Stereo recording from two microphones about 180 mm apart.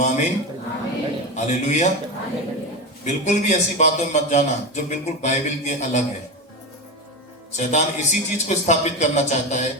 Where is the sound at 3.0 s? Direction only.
40° left (ahead or behind).